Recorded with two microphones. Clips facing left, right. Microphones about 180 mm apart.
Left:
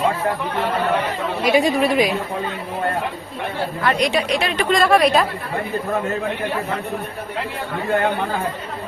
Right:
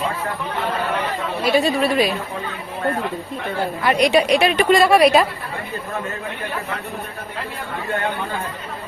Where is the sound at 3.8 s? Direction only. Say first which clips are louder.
Right 4 dB; 10° right (ahead or behind).